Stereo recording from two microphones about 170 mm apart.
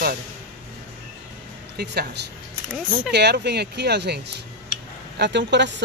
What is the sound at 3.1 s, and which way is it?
Speech, 85° right.